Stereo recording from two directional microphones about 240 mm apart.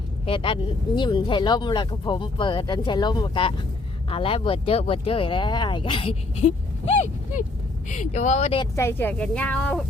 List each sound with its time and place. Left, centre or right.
0.3 s speech: left
8.7 s speech: centre